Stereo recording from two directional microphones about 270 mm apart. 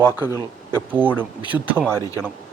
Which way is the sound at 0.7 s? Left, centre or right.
Centre.